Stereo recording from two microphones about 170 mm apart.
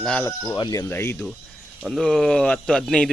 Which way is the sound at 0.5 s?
25° left (ahead or behind).